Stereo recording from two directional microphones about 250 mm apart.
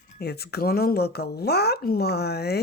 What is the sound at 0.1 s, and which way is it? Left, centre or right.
Speech, left.